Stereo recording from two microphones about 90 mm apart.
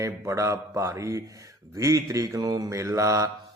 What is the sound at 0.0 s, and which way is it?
Mantra, 35° right (ahead or behind).